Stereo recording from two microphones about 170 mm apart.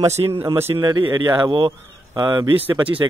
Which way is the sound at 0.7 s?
25° right (ahead or behind).